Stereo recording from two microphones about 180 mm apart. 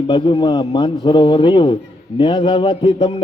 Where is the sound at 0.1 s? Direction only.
30° left (ahead or behind).